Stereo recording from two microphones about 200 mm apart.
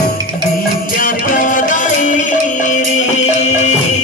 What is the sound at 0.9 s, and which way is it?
Music, 40° left (ahead or behind).